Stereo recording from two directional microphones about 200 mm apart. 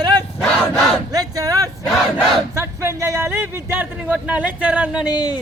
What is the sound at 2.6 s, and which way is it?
A man's voice, 15° right (ahead or behind).